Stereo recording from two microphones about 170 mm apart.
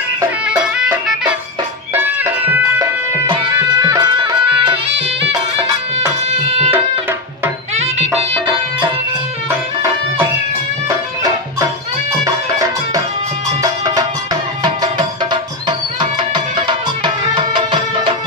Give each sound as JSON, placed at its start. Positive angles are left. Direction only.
{"t": 0.5, "sound": "music", "side_deg": -5}
{"t": 3.3, "sound": "music", "side_deg": -25}
{"t": 6.7, "sound": "music", "side_deg": -15}
{"t": 7.8, "sound": "music", "side_deg": -35}
{"t": 13.6, "sound": "music", "side_deg": -25}